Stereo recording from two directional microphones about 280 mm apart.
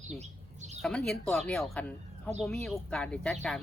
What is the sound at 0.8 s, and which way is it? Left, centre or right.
Speech, centre.